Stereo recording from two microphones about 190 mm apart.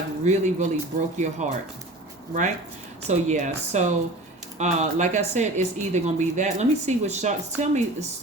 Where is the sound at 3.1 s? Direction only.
40° right (ahead or behind).